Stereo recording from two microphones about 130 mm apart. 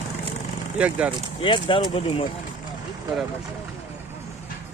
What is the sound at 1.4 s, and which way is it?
Speech, 40° left (ahead or behind).